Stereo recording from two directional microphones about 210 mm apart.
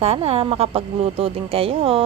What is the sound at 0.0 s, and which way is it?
Speech, 30° right (ahead or behind).